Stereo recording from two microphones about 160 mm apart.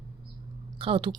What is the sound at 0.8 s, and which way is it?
Speech, 35° right (ahead or behind).